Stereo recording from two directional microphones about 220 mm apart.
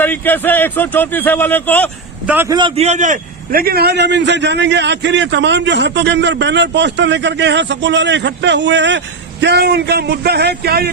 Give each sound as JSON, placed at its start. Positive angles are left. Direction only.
{"t": 0.0, "sound": "a man's voice", "side_deg": 10}
{"t": 2.2, "sound": "a man's voice", "side_deg": -10}
{"t": 2.6, "sound": "a man's voice", "side_deg": -25}